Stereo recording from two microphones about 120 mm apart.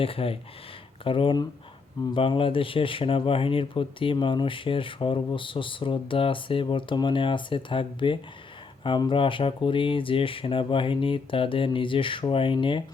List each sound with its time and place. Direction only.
0.0 s speech: 50° left (ahead or behind)